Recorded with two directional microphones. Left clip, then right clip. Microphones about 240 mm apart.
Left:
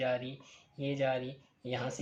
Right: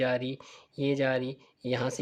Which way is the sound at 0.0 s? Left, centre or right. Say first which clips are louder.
Right 5 dB; right.